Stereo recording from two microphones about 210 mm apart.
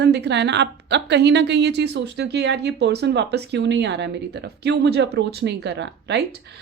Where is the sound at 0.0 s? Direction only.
55° right (ahead or behind).